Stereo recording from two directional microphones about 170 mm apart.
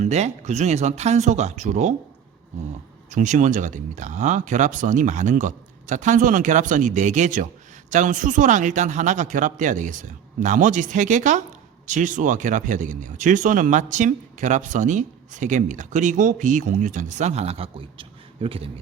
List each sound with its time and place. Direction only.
0.0 s speech: 40° right (ahead or behind)
3.1 s speech: 50° right (ahead or behind)